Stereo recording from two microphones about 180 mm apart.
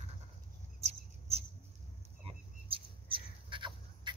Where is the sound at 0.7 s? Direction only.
35° right (ahead or behind).